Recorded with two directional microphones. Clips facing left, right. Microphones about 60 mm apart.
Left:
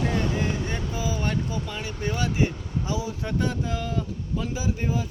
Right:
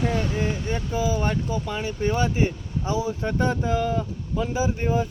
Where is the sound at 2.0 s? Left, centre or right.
Right.